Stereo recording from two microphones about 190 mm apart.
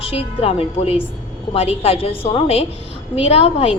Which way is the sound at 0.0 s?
30° left (ahead or behind).